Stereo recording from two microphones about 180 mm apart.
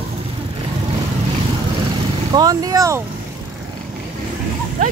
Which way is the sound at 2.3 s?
20° right (ahead or behind).